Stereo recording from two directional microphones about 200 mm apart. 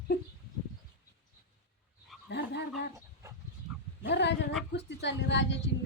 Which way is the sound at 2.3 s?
60° left (ahead or behind).